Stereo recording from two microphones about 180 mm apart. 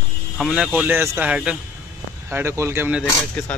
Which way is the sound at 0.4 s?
5° right (ahead or behind).